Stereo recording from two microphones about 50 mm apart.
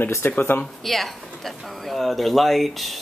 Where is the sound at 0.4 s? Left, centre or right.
Left.